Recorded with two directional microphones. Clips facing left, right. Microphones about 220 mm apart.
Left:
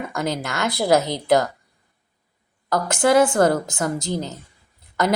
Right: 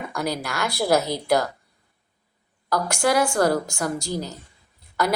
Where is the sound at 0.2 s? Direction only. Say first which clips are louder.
Left 2 dB; 20° left (ahead or behind).